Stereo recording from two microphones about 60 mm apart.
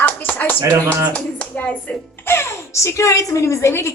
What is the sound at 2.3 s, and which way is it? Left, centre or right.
Speech, left.